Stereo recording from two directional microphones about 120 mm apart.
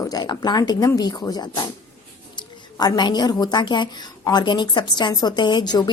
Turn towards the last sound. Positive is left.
turn(degrees=35)  # may be behind; listen again after turning